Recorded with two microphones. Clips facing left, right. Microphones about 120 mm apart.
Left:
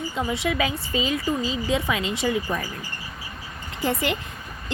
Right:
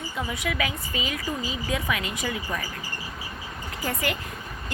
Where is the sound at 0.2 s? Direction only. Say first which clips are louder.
Left 4 dB; 25° left (ahead or behind).